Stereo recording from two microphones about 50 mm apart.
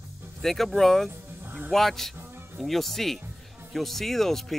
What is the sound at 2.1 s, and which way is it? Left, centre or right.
Music, right.